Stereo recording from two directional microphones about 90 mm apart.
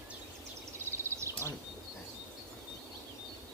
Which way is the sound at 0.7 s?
30° right (ahead or behind).